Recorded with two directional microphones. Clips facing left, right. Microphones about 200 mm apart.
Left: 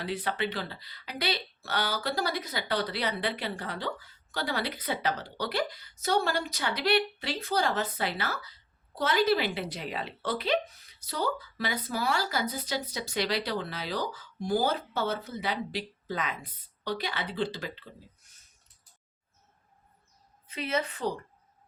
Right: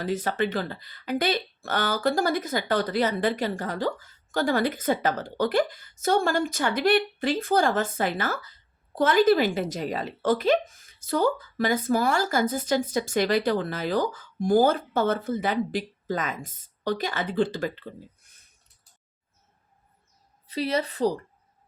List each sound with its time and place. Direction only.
0.0 s speech: 45° right (ahead or behind)
18.2 s a sound: 55° right (ahead or behind)
20.5 s a woman's voice: 35° right (ahead or behind)